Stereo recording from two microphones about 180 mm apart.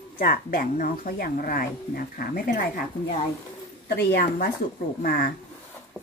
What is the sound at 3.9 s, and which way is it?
Speech, 60° left (ahead or behind).